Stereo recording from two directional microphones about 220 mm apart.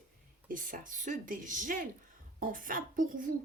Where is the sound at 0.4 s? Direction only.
40° right (ahead or behind).